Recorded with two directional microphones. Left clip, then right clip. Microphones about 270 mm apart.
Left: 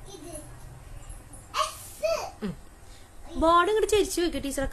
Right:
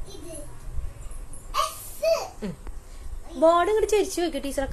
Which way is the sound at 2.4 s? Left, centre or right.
Centre.